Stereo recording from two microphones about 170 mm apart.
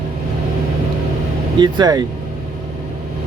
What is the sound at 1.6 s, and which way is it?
Speech, 25° right (ahead or behind).